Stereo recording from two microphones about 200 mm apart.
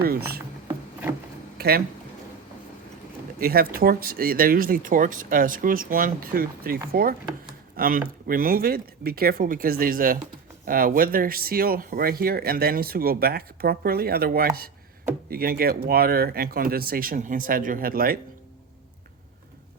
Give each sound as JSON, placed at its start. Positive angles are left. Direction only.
{"t": 0.0, "sound": "speech", "side_deg": -50}
{"t": 1.5, "sound": "speech", "side_deg": -50}
{"t": 3.4, "sound": "speech", "side_deg": -45}